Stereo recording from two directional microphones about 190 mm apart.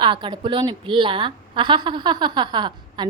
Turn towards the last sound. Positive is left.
turn(degrees=-25)  # may be behind; listen again after turning